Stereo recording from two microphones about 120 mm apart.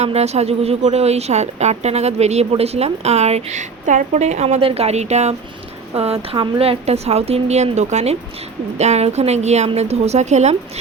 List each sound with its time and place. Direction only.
0.0 s a woman's voice: 65° right (ahead or behind)